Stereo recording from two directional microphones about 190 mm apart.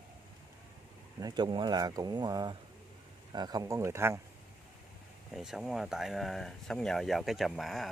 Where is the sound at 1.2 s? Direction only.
20° right (ahead or behind).